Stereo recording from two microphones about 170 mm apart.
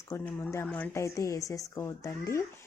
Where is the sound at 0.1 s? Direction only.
15° left (ahead or behind).